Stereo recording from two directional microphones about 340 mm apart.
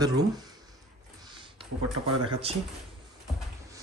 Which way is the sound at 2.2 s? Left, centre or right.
Centre.